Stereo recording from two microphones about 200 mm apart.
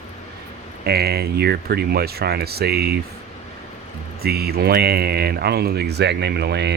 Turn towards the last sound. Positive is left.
turn(degrees=-55)  # may be behind; listen again after turning